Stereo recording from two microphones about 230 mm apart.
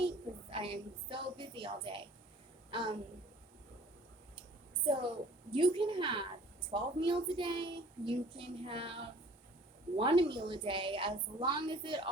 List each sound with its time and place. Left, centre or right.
0.5 s a woman's voice: right
4.9 s a woman's voice: right